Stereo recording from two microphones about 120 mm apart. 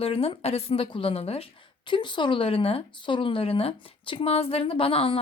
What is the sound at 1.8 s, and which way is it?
Speech, 40° left (ahead or behind).